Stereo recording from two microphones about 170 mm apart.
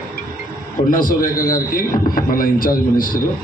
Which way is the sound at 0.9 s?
55° left (ahead or behind).